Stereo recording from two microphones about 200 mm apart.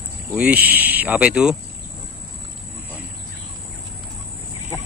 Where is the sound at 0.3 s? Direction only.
5° right (ahead or behind).